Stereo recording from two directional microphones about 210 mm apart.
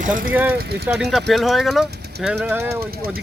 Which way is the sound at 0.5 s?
50° right (ahead or behind).